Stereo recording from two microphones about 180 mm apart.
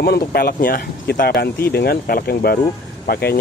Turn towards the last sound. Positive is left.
turn(degrees=60)  # may be behind; listen again after turning